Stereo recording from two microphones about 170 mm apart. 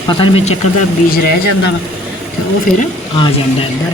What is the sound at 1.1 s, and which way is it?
Speech, 65° left (ahead or behind).